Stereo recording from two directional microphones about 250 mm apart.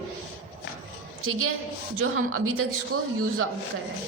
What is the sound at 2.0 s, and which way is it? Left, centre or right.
Speech, right.